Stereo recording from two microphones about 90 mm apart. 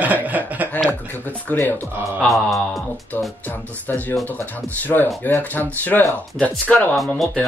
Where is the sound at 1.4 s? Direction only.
20° left (ahead or behind).